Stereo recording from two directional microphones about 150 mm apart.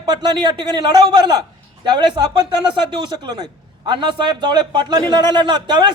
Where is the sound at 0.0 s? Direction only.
30° right (ahead or behind).